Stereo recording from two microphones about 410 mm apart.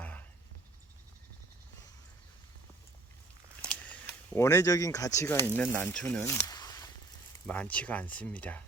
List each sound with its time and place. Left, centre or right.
0.0 s a sound: centre
3.6 s camera: centre
5.5 s speech: centre